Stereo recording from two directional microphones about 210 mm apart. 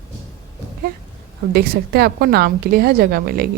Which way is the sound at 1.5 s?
45° right (ahead or behind).